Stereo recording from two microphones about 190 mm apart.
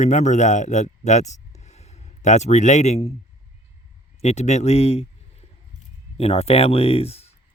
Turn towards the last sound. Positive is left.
turn(degrees=30)  # may be behind; listen again after turning